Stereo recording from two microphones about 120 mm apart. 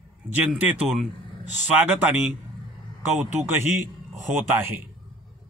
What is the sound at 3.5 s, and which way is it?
A man's voice, 20° right (ahead or behind).